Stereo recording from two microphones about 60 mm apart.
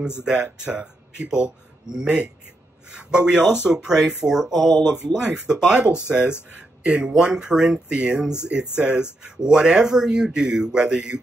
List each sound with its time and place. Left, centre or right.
0.2 s speech: right